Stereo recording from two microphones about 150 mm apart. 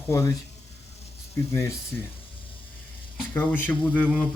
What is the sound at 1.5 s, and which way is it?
Speech, 20° left (ahead or behind).